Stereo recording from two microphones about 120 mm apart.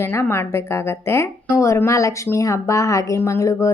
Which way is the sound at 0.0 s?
20° left (ahead or behind).